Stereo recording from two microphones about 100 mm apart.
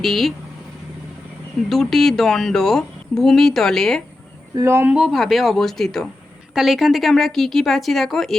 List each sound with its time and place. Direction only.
0.0 s speech: centre (ahead or behind)
1.7 s speech: 5° left (ahead or behind)
4.5 s speech: 25° right (ahead or behind)
4.9 s speech: 10° right (ahead or behind)